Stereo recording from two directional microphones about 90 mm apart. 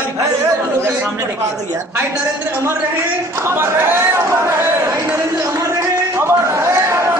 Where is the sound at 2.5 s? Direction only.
30° right (ahead or behind).